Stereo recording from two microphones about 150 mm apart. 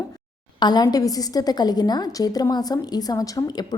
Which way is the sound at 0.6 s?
25° left (ahead or behind).